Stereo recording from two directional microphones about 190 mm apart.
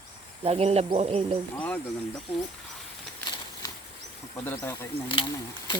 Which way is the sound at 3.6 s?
20° left (ahead or behind).